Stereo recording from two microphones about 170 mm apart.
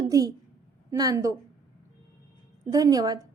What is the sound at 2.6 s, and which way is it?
Speech, 20° right (ahead or behind).